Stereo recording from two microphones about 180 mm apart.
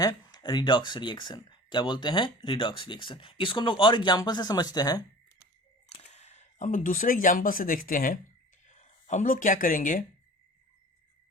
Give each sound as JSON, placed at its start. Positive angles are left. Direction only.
{"t": 0.0, "sound": "speech", "side_deg": 20}
{"t": 5.9, "sound": "speech", "side_deg": 35}